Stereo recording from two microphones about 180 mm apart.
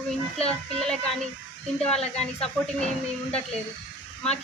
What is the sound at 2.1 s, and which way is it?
Speech, 5° left (ahead or behind).